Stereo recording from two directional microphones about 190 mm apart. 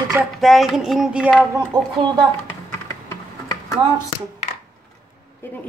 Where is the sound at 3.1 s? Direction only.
15° left (ahead or behind).